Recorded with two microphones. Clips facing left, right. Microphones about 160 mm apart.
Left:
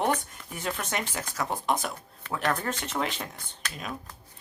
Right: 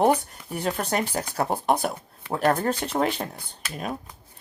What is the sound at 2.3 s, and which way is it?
A woman's voice, 35° right (ahead or behind).